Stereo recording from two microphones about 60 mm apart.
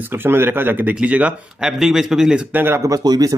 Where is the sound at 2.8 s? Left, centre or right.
Right.